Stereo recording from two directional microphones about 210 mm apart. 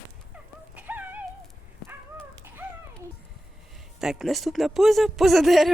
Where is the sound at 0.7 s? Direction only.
10° right (ahead or behind).